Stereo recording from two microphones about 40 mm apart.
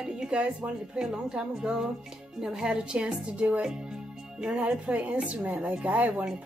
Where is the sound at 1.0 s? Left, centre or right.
Right.